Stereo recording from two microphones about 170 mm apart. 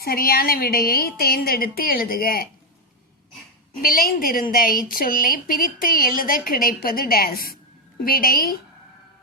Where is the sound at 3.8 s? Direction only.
55° left (ahead or behind).